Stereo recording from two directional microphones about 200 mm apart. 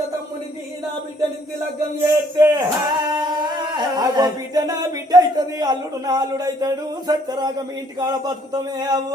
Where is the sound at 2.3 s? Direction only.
15° right (ahead or behind).